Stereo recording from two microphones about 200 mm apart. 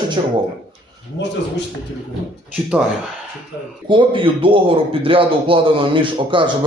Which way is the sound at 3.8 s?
25° right (ahead or behind).